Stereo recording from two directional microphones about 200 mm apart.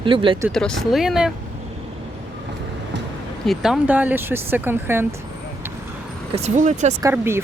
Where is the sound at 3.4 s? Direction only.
Centre (ahead or behind).